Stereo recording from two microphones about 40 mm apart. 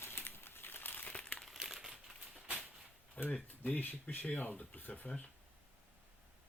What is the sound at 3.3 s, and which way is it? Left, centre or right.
Speech, left.